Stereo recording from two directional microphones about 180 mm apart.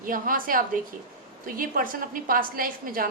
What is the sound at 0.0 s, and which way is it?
A woman's voice, 50° right (ahead or behind).